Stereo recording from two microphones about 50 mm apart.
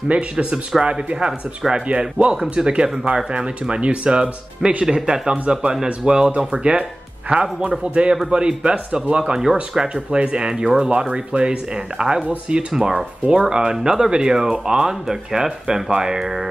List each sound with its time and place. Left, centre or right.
0.1 s speech: right
9.3 s speech: centre